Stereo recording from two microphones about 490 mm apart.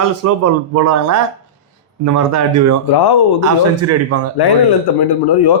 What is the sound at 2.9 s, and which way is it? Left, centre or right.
Speech, left.